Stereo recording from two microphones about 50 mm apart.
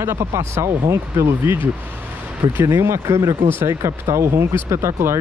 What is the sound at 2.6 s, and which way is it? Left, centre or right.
Speech, right.